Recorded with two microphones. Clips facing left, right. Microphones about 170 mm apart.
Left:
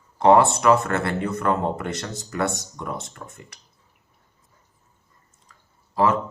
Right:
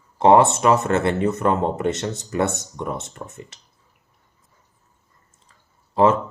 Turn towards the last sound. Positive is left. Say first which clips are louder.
# right 4 dB
turn(degrees=-25)  # may be behind; listen again after turning